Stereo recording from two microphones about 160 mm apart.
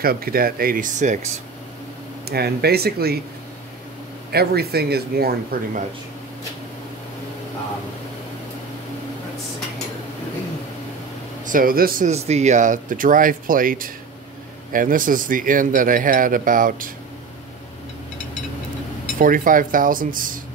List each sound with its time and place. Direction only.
0.0 s speech: 70° right (ahead or behind); by 1.3 s 50° right (ahead or behind)
2.2 s speech: 80° right
4.3 s speech: 80° right
11.4 s speech: 60° right (ahead or behind)
12.1 s speech: 45° right (ahead or behind); by 16.9 s 60° right (ahead or behind)
19.1 s speech: 60° right (ahead or behind)